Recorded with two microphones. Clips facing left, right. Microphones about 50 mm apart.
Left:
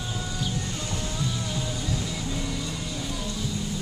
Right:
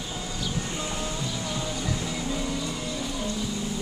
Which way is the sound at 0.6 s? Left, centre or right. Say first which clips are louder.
Right 1 dB; centre.